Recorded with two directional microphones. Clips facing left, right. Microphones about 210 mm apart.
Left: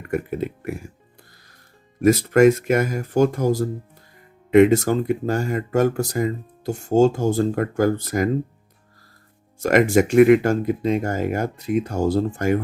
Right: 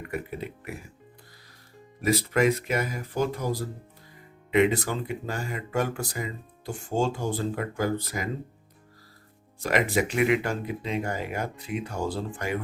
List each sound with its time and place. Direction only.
0.1 s speech: 45° left (ahead or behind)
2.0 s speech: 45° left (ahead or behind)
9.6 s speech: 45° left (ahead or behind)